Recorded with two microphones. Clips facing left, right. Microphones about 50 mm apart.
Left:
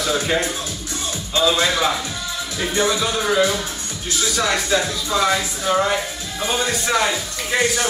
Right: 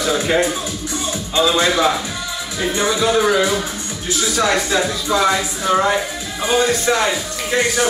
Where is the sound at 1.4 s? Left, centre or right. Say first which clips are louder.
Right 3 dB; centre.